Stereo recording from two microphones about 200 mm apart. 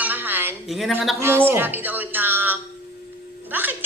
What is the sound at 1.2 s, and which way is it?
A woman's voice, 10° right (ahead or behind).